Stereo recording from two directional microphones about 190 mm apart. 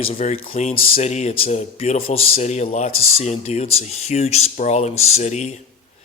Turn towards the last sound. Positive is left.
turn(degrees=35)  # may be behind; listen again after turning